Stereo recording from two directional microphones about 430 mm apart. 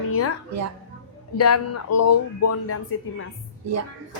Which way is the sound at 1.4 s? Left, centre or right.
Left.